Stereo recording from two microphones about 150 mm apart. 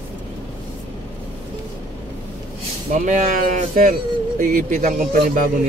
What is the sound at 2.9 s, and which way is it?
Speech, 55° right (ahead or behind).